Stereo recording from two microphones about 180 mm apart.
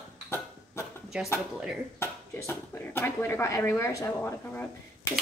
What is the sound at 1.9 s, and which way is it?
Speech, 15° left (ahead or behind).